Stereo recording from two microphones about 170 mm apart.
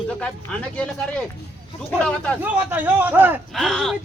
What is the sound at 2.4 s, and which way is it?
Speech, 10° right (ahead or behind).